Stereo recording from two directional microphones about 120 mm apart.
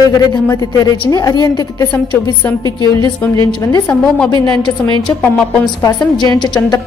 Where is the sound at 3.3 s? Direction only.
30° left (ahead or behind).